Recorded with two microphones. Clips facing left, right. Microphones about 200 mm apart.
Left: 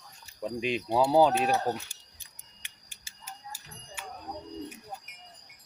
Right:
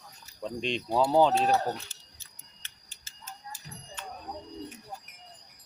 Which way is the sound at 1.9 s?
10° left (ahead or behind).